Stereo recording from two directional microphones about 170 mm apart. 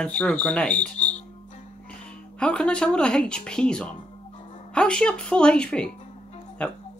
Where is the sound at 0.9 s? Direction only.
45° left (ahead or behind).